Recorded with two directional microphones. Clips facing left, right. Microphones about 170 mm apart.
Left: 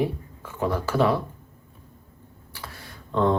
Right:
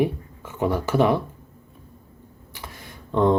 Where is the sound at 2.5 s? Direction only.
15° right (ahead or behind).